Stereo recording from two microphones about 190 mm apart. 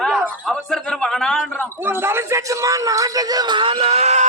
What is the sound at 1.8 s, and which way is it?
A man's voice, 10° right (ahead or behind).